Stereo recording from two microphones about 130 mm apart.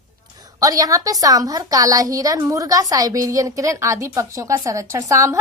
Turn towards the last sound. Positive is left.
turn(degrees=-25)  # may be behind; listen again after turning